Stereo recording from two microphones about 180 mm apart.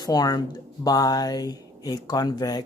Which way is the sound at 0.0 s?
20° left (ahead or behind).